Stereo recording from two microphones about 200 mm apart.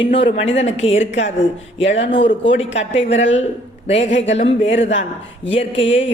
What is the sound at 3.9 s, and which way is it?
Speech, 30° left (ahead or behind).